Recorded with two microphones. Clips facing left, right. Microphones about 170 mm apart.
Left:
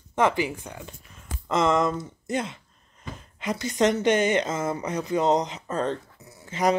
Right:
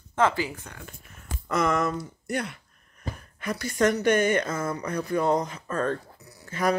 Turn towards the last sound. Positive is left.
turn(degrees=20)  # may be behind; listen again after turning